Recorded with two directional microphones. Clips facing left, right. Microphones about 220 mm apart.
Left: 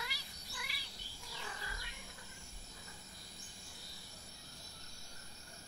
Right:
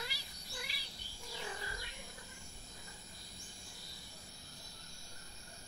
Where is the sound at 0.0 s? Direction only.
30° right (ahead or behind).